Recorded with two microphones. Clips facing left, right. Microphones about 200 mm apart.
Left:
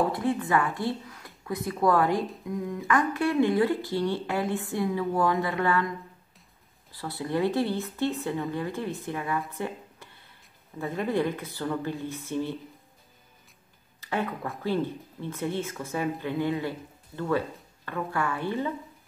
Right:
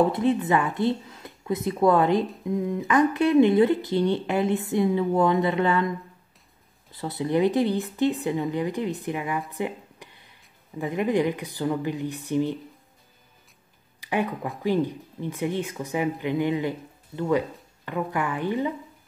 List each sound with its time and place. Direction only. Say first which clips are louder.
0.1 s speech: right 4 dB; 20° right (ahead or behind)
6.9 s speech: right 5 dB; 20° right (ahead or behind)
9.5 s a sound: right 4 dB; 15° right (ahead or behind)
10.8 s speech: right 4 dB; 15° right (ahead or behind)
13.9 s speech: right 4 dB; 15° right (ahead or behind)